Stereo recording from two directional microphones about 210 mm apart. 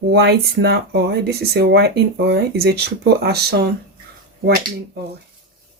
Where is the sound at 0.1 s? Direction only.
50° right (ahead or behind).